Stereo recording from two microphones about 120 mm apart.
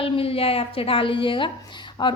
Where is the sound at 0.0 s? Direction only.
50° left (ahead or behind).